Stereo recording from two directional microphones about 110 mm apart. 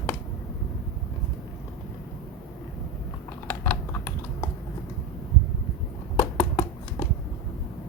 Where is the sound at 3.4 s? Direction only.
20° left (ahead or behind).